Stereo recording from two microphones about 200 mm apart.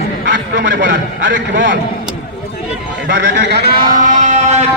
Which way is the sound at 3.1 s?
65° right (ahead or behind).